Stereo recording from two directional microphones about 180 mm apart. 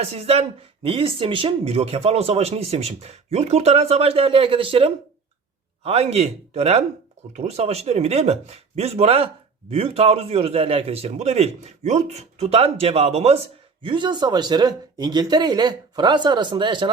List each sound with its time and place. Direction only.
0.0 s speech: 35° right (ahead or behind)